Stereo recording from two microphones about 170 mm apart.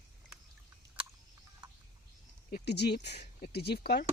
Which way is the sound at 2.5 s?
65° left (ahead or behind).